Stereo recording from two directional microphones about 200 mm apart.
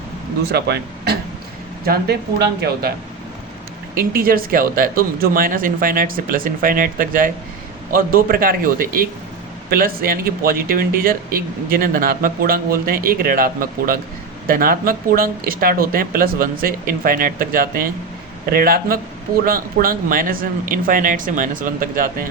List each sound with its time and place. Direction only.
0.5 s speech: 55° right (ahead or behind)
4.1 s speech: 45° right (ahead or behind)